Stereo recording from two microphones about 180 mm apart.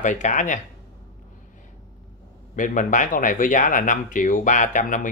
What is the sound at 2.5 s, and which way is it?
Speech, 45° left (ahead or behind).